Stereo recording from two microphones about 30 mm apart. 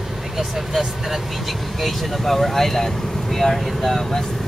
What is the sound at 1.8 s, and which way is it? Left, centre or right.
Speech, centre.